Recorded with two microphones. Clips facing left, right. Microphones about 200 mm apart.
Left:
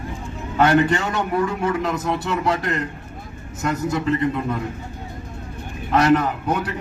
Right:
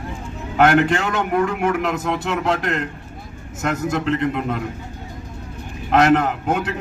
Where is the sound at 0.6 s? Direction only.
90° right.